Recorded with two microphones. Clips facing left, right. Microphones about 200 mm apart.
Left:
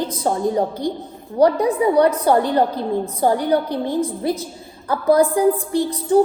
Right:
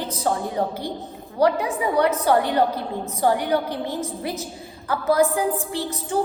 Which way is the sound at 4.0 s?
30° left (ahead or behind).